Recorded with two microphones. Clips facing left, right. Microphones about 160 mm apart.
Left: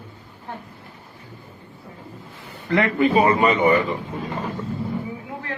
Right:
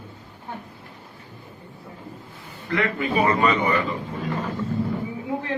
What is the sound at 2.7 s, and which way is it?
Speech, 25° left (ahead or behind).